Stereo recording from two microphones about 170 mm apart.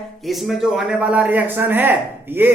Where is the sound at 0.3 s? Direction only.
Centre (ahead or behind).